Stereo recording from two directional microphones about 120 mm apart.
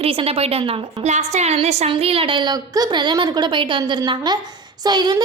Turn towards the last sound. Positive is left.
turn(degrees=-35)  # may be behind; listen again after turning